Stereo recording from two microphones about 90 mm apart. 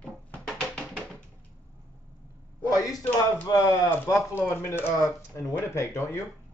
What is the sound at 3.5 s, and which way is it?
Speech, 50° left (ahead or behind).